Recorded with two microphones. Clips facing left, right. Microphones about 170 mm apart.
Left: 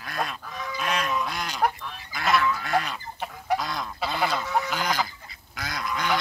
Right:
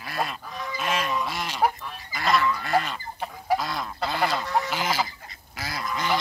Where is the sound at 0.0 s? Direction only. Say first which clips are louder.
Right 1 dB; 5° right (ahead or behind).